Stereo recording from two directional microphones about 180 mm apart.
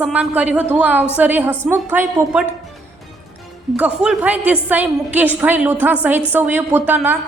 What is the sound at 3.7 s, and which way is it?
A woman's voice, 5° right (ahead or behind).